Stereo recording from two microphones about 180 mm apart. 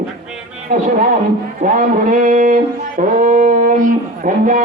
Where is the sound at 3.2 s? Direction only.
45° right (ahead or behind).